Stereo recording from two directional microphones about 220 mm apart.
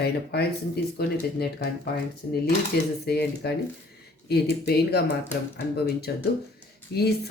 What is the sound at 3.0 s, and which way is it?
Speech, 45° left (ahead or behind).